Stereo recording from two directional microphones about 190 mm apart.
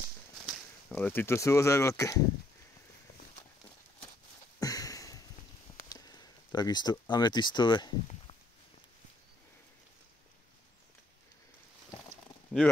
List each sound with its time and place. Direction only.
0.5 s speech: 5° left (ahead or behind)
4.6 s sniff: 20° left (ahead or behind)
5.8 s speech: 20° left (ahead or behind)